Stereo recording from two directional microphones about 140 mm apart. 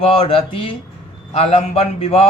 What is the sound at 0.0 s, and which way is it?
A man's voice, 40° left (ahead or behind).